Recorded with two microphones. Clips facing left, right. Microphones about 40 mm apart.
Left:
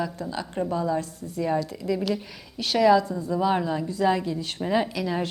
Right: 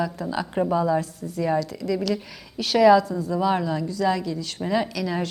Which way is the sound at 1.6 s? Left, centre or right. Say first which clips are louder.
Right 2 dB; centre.